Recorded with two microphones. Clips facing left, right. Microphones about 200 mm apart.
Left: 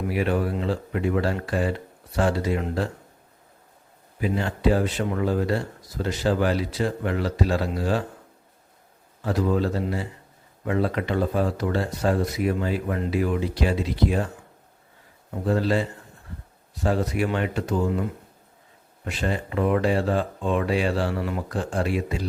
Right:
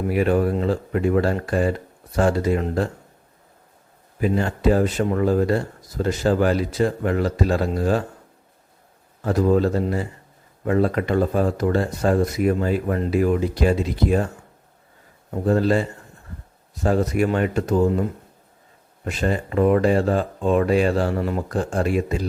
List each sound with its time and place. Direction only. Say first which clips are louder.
0.1 s speech: right 6 dB; 45° right (ahead or behind)
4.2 s speech: right 3 dB; 45° right (ahead or behind)
9.2 s speech: right 5 dB; 45° right (ahead or behind)
15.4 s speech: right 4 dB; 45° right (ahead or behind)
19.0 s speech: right 4 dB; 45° right (ahead or behind)